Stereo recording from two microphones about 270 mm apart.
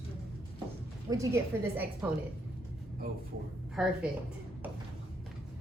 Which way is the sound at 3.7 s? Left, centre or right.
Centre.